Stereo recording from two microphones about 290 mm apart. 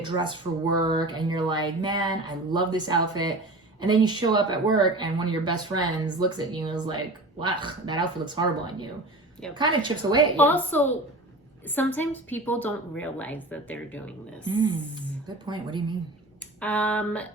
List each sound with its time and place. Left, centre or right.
0.0 s speech: centre
10.3 s a woman's voice: centre
14.4 s speech: centre
16.6 s a woman's voice: centre